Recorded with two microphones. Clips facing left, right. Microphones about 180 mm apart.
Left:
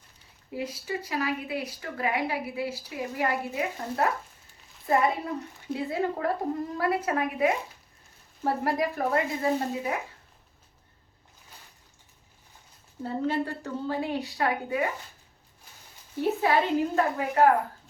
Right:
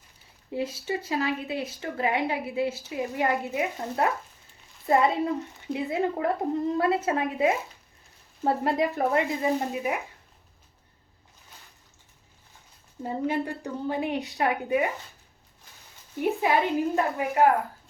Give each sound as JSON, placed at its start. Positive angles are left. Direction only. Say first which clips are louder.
{"t": 0.5, "sound": "speech", "louder": "right 3 dB", "side_deg": -25}
{"t": 13.0, "sound": "speech", "louder": "even", "side_deg": -15}
{"t": 16.4, "sound": "a woman's voice", "louder": "even", "side_deg": -15}